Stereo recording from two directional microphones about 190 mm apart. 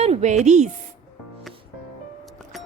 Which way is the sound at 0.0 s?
35° right (ahead or behind).